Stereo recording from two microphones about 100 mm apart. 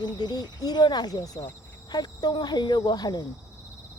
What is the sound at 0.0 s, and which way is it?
Speech, 45° left (ahead or behind).